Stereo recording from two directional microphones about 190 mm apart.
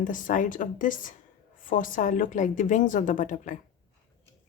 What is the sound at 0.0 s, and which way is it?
A woman's voice, 45° left (ahead or behind).